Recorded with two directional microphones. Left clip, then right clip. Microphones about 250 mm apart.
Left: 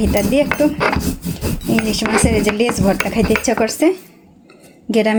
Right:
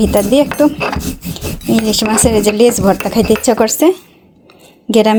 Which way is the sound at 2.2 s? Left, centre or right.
Right.